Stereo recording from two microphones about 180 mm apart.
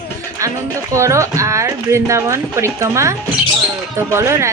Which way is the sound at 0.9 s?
15° right (ahead or behind).